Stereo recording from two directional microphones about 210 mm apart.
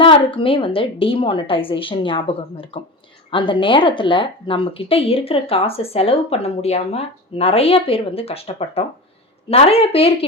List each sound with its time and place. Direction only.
0.0 s a woman's voice: 25° left (ahead or behind)